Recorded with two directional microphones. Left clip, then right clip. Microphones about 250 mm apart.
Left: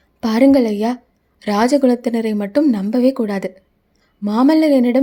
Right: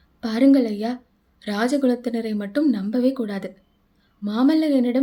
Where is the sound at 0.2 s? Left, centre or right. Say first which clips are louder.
Left 5 dB; left.